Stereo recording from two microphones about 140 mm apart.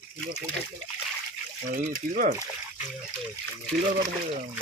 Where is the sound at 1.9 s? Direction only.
80° right.